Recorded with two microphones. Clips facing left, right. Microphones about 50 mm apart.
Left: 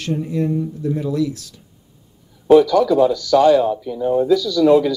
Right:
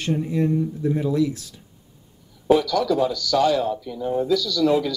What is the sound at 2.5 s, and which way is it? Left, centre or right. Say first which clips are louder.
A man's voice: left 7 dB; centre.